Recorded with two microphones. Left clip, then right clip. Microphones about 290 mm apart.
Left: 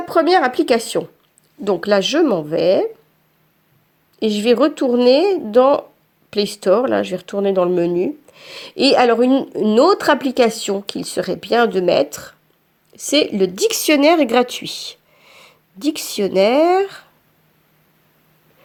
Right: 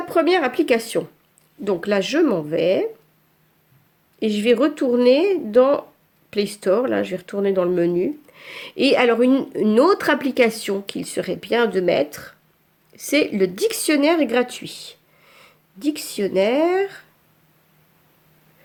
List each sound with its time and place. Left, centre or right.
0.1 s speech: centre
4.2 s speech: centre